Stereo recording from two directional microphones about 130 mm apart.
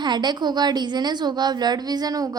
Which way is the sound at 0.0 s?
35° right (ahead or behind).